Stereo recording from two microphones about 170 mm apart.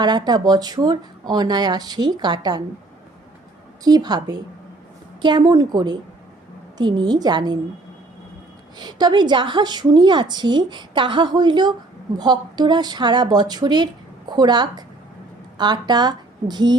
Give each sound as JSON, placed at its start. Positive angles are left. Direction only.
{"t": 0.0, "sound": "a woman's voice", "side_deg": -25}
{"t": 3.8, "sound": "a woman's voice", "side_deg": -25}
{"t": 8.8, "sound": "a woman's voice", "side_deg": -25}